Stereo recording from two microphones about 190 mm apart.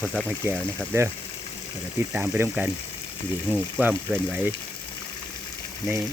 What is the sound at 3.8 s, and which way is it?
Speech, 10° right (ahead or behind).